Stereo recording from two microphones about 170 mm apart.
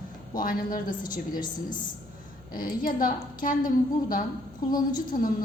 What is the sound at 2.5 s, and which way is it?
A woman's voice, 55° left (ahead or behind).